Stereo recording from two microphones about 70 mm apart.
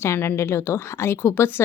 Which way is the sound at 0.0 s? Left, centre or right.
Left.